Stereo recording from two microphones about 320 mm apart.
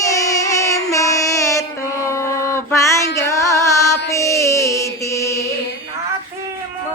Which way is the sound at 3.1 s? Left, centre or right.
Centre.